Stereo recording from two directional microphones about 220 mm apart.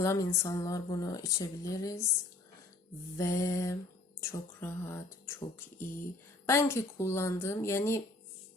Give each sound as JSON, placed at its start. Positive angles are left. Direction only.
{"t": 0.0, "sound": "speech", "side_deg": 15}
{"t": 3.2, "sound": "speech", "side_deg": 15}
{"t": 6.4, "sound": "speech", "side_deg": 10}